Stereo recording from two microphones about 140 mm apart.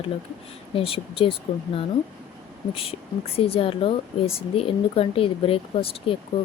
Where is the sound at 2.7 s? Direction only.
40° left (ahead or behind).